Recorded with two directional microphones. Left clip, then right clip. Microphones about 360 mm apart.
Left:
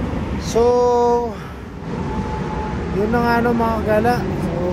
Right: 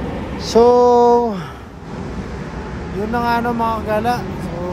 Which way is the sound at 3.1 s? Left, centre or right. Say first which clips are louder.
Even; centre.